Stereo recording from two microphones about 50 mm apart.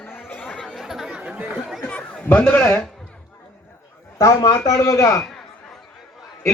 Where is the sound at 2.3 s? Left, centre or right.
Left.